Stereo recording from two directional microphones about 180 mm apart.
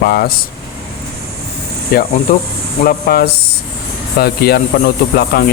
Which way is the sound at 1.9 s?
60° left (ahead or behind).